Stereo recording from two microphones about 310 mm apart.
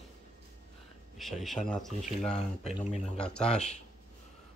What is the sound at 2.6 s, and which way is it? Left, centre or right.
Speech, left.